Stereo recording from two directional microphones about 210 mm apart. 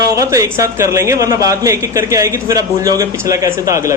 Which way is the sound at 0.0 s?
15° right (ahead or behind).